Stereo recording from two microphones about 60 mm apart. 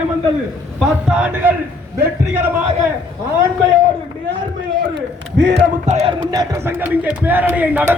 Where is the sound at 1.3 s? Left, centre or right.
Right.